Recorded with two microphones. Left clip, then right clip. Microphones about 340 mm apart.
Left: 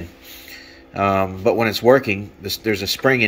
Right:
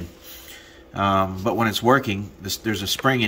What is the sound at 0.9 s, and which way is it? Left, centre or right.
Speech, right.